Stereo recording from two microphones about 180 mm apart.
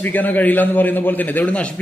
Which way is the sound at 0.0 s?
10° left (ahead or behind).